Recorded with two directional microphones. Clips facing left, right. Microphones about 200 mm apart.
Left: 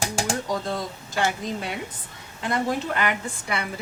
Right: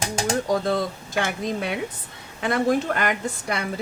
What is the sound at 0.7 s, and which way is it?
A woman's voice, 60° right (ahead or behind).